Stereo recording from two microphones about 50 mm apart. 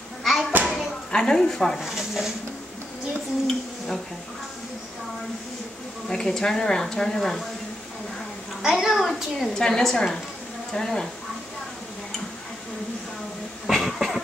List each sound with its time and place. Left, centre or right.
0.2 s a sound: centre
0.5 s a sound: right
1.1 s speech: centre
1.8 s speech: centre
6.0 s speech: centre
8.6 s a child's voice: centre
9.0 s a woman's voice: centre
13.7 s cough: centre